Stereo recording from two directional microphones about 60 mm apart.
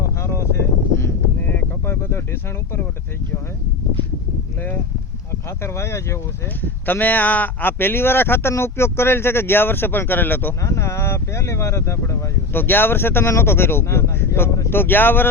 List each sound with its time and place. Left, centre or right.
0.2 s wind noise: left
1.4 s a sound: left
5.6 s speech: left
6.6 s speech: left
10.6 s speech: left